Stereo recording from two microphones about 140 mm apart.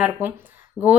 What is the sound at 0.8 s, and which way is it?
Speech, 15° left (ahead or behind).